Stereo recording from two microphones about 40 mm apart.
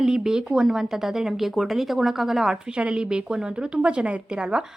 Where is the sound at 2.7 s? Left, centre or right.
Right.